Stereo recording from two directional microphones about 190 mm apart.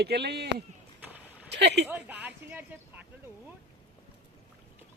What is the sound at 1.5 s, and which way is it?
Speech, 65° right (ahead or behind).